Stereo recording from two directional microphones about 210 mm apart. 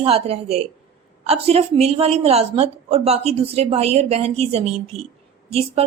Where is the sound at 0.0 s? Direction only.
30° right (ahead or behind).